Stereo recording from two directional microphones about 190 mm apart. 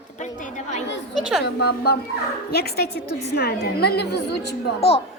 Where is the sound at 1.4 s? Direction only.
55° left (ahead or behind).